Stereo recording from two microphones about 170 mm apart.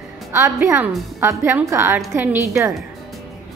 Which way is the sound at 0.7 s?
15° right (ahead or behind).